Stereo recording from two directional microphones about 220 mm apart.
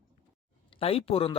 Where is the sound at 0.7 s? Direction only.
25° left (ahead or behind).